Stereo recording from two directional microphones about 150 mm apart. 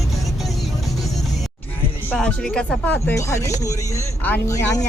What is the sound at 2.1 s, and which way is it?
Speech, 5° left (ahead or behind).